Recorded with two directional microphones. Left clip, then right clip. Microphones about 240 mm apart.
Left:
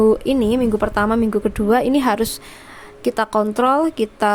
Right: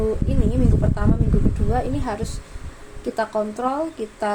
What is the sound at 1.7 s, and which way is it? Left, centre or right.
Speech, left.